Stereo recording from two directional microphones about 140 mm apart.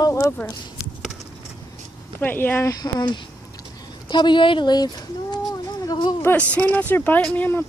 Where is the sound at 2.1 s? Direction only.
15° left (ahead or behind).